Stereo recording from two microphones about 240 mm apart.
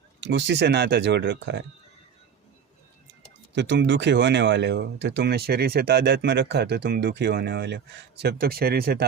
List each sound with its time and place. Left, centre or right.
0.2 s speech: right
3.5 s speech: right